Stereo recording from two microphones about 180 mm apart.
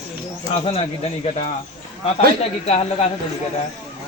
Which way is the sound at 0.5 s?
35° left (ahead or behind).